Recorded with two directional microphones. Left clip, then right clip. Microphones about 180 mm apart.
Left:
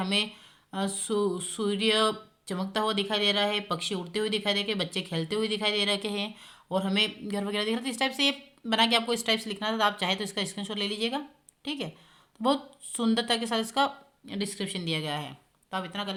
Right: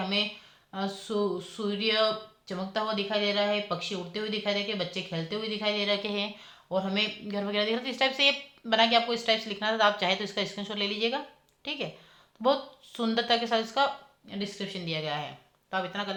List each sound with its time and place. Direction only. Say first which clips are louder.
0.0 s speech: left 1 dB; 50° left (ahead or behind)